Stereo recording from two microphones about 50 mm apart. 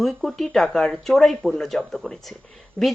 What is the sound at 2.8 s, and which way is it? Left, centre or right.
Speech, centre.